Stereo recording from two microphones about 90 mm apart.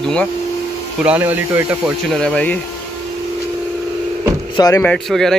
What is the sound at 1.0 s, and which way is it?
Speech, 20° right (ahead or behind).